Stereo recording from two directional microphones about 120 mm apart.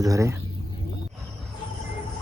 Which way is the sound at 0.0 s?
25° right (ahead or behind).